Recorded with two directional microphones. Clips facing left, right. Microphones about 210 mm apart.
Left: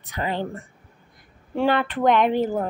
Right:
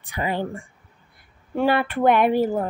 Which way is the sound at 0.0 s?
10° right (ahead or behind).